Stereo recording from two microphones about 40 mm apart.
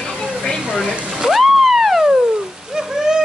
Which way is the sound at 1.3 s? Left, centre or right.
Centre.